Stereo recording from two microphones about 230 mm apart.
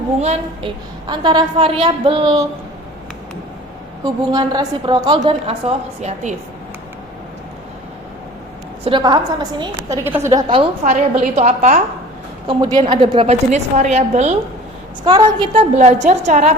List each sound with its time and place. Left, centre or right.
0.2 s a woman's voice: right
4.0 s a woman's voice: centre
8.8 s a woman's voice: centre
10.3 s a woman's voice: right
10.8 s a woman's voice: right
12.5 s a woman's voice: centre